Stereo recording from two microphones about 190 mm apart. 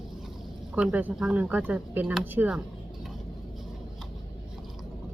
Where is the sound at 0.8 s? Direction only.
5° right (ahead or behind).